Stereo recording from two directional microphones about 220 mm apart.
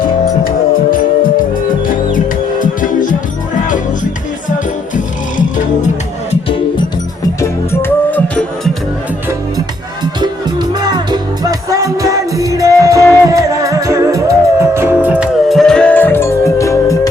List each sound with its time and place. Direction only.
0.0 s music: 40° left (ahead or behind)
2.6 s music: 35° left (ahead or behind)
7.4 s music: 10° left (ahead or behind)
10.2 s music: 20° right (ahead or behind); by 17.1 s 15° left (ahead or behind)